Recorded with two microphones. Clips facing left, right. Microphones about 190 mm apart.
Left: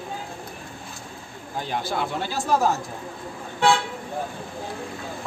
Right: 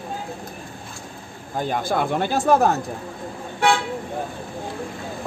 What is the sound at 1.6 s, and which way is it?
Speech, 50° right (ahead or behind).